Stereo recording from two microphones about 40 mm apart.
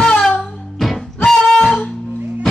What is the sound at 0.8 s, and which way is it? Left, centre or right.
Music, centre.